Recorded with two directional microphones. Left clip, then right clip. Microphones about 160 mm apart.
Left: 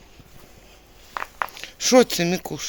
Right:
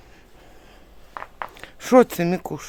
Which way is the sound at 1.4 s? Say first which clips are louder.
Left 3 dB; 25° right (ahead or behind).